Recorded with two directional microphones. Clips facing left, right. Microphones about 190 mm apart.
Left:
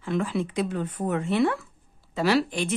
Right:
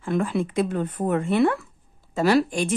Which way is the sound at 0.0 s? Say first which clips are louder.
Right 3 dB; 50° right (ahead or behind).